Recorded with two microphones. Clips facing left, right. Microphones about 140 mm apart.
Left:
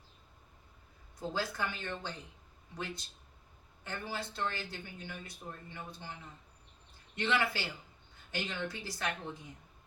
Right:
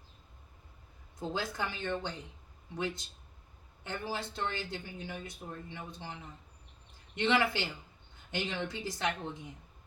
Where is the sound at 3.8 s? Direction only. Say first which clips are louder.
Right 3 dB; 20° right (ahead or behind).